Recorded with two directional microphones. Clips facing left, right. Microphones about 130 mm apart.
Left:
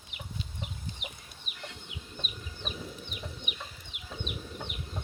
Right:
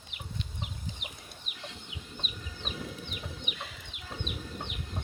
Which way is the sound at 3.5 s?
80° right.